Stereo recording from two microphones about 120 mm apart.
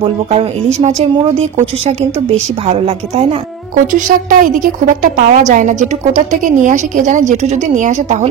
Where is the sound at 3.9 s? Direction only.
90° right.